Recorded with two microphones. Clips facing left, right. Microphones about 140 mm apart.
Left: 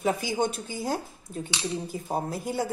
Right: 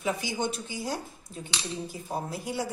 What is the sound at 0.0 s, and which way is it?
Speech, 50° left (ahead or behind).